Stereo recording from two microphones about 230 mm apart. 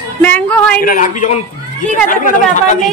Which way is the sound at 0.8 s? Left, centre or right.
Left.